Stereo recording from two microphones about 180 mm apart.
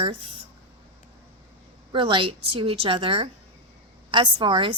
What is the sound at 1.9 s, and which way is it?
A woman's voice, 25° right (ahead or behind).